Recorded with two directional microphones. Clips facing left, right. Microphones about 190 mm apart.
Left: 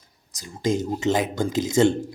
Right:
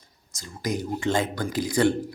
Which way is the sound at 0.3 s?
20° left (ahead or behind).